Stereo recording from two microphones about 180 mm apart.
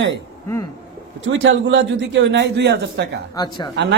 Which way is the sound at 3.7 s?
70° right (ahead or behind).